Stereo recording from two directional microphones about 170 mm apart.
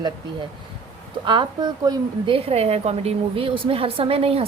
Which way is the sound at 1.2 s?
30° right (ahead or behind).